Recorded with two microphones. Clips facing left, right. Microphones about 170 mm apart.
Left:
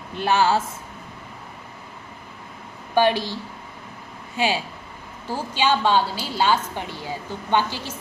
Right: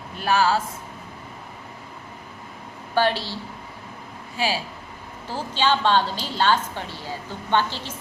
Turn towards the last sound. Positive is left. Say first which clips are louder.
# left 1 dB
turn(degrees=10)  # may be behind; listen again after turning